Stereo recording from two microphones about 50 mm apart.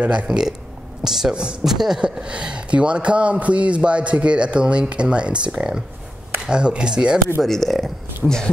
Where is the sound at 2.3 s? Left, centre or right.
Right.